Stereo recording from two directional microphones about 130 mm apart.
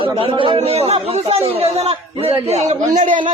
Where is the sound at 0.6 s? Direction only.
50° right (ahead or behind).